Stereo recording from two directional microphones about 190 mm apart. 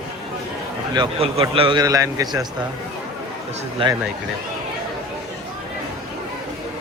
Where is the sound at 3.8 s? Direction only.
25° right (ahead or behind).